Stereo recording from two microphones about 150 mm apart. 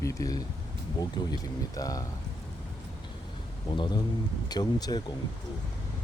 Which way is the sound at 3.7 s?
30° left (ahead or behind).